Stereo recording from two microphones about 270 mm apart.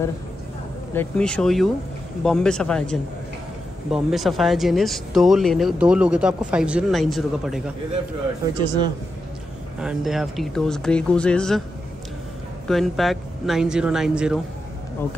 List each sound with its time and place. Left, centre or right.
0.9 s speech: centre
8.5 s speech: centre
9.8 s speech: centre
12.6 s speech: centre